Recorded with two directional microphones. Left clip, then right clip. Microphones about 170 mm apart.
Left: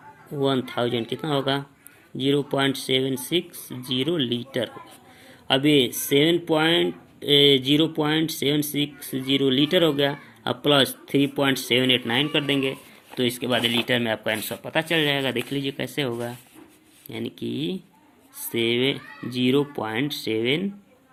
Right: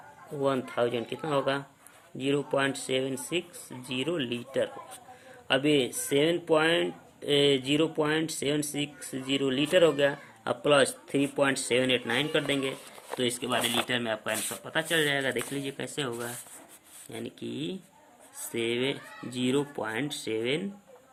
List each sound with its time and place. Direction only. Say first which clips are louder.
1.2 s speech: left 2 dB; 25° left (ahead or behind)